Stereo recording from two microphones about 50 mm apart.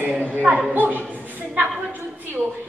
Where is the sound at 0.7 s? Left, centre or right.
Right.